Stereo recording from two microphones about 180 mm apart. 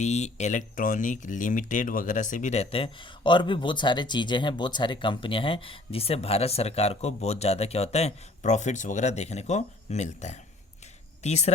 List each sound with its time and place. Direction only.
0.0 s speech: 40° left (ahead or behind)